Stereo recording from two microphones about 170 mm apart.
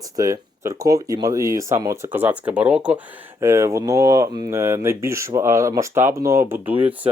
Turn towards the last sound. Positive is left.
turn(degrees=-10)  # may be behind; listen again after turning